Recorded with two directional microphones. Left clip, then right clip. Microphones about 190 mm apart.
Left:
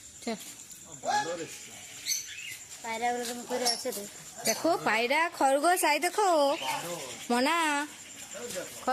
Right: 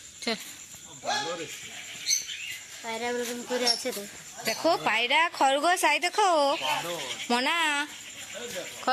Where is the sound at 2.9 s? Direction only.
40° right (ahead or behind).